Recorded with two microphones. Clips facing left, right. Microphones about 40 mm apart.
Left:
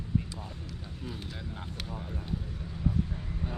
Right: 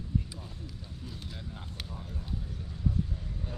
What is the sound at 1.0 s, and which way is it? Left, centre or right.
Speech, left.